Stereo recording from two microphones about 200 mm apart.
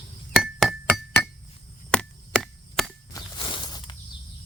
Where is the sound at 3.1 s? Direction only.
25° left (ahead or behind).